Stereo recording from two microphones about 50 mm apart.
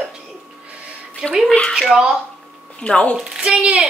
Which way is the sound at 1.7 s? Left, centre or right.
Centre.